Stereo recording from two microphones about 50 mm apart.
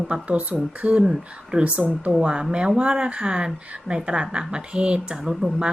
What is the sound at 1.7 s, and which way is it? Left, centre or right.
Speech, right.